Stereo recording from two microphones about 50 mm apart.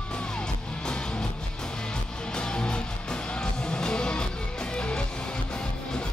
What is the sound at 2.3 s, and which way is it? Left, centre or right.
Music, centre.